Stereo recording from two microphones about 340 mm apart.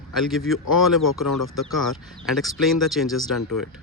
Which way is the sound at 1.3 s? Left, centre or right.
Left.